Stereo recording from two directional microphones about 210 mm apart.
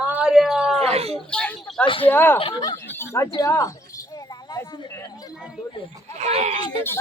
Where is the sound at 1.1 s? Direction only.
5° left (ahead or behind).